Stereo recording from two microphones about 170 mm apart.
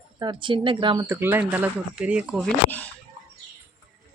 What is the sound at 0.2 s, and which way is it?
Speech, 30° right (ahead or behind).